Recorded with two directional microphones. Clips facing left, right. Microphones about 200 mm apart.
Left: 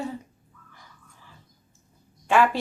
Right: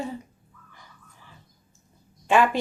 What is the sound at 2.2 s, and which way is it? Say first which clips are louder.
Speech: even; 20° right (ahead or behind).